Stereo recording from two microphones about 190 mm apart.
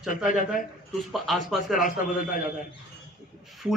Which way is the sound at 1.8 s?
45° left (ahead or behind).